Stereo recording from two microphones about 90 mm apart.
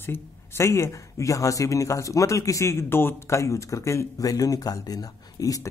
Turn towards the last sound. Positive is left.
turn(degrees=40)  # may be behind; listen again after turning